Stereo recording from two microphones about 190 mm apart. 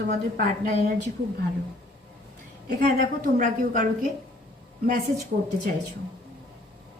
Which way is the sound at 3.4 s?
45° right (ahead or behind).